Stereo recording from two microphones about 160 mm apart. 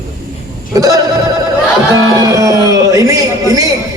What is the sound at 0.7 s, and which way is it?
A man's voice, 20° right (ahead or behind).